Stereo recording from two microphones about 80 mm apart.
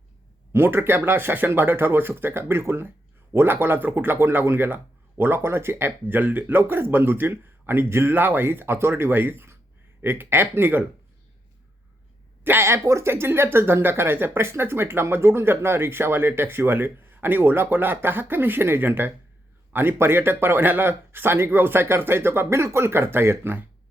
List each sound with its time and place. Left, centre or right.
0.5 s speech: right
12.5 s speech: right